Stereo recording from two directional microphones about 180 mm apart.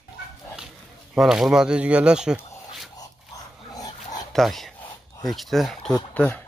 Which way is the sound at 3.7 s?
20° left (ahead or behind).